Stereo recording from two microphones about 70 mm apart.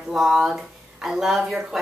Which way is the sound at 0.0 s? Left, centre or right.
Centre.